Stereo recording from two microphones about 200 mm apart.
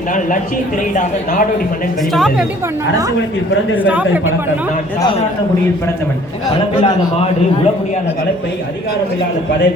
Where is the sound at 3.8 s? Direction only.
5° right (ahead or behind).